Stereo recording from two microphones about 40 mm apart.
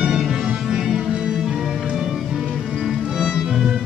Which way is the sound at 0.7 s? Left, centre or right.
Centre.